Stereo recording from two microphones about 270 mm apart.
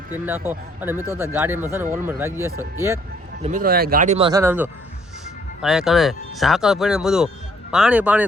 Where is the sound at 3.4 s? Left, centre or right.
Right.